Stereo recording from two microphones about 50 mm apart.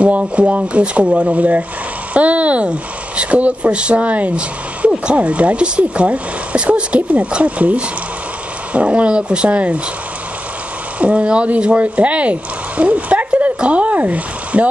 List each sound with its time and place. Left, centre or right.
0.0 s speech: right
11.0 s speech: right